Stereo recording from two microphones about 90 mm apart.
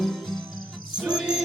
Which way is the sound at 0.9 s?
10° right (ahead or behind).